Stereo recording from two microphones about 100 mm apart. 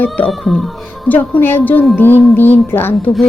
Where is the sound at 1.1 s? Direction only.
15° left (ahead or behind).